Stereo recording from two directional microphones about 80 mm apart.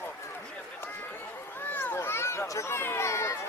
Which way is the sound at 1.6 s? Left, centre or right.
Left.